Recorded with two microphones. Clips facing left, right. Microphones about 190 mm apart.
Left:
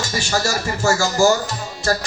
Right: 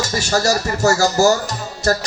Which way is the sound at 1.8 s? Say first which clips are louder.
Right 3 dB; 40° right (ahead or behind).